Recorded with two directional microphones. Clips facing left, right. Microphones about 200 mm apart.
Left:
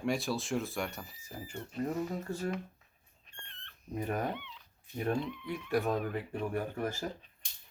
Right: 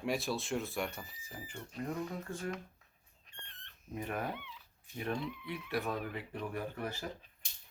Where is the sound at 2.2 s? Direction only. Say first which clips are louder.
Left 4 dB; 35° left (ahead or behind).